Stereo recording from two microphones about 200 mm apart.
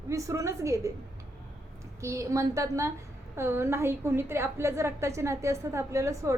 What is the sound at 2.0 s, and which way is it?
A woman's voice, 15° right (ahead or behind).